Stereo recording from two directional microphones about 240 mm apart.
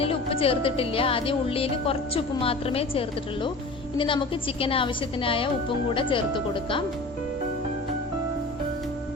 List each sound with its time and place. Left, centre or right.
0.0 s speech: left